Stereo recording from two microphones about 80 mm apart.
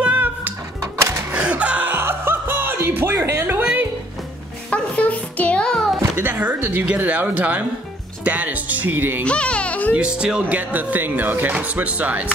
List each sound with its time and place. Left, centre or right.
0.0 s music: right
1.3 s music: centre
4.6 s music: centre
6.1 s speech: right
9.2 s speech: centre
9.9 s speech: centre